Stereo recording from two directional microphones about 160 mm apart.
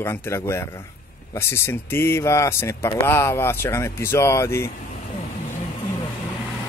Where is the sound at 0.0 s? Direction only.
15° left (ahead or behind).